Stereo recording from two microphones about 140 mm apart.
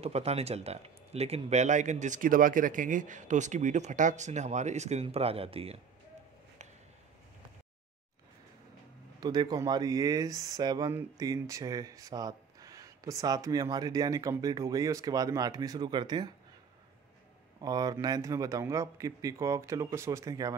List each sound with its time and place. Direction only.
0.0 s speech: 50° right (ahead or behind)
9.2 s speech: 30° right (ahead or behind)
17.6 s speech: 25° right (ahead or behind)